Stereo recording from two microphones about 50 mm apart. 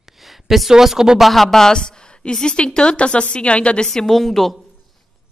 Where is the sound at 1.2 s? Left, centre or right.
Centre; by 3.8 s left.